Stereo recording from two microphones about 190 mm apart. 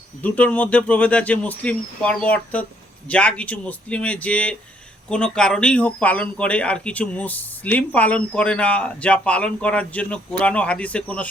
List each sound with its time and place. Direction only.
0.2 s a man's voice: 5° left (ahead or behind)